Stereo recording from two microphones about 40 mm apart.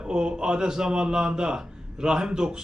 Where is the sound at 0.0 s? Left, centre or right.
Right.